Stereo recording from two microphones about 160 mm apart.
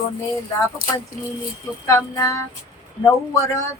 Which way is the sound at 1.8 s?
20° left (ahead or behind).